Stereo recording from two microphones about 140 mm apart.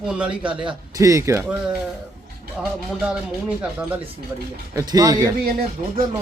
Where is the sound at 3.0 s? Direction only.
10° right (ahead or behind).